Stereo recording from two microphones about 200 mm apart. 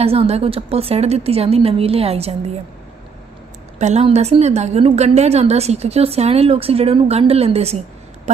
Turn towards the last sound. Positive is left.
turn(degrees=-30)  # may be behind; listen again after turning